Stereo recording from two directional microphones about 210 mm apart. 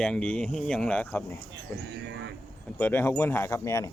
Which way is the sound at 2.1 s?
55° right (ahead or behind).